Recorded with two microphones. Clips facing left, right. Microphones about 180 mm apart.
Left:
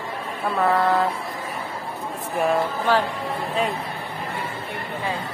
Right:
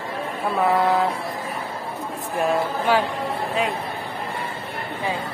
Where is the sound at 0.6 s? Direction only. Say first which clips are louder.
Right 1 dB; 10° right (ahead or behind).